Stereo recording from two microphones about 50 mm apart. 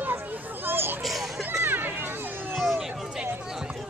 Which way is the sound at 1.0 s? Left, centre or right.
Centre.